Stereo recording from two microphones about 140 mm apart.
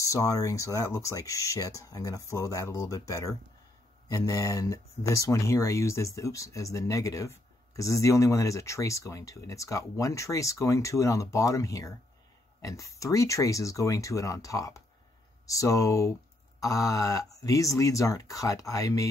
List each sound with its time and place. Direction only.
0.0 s speech: 25° left (ahead or behind)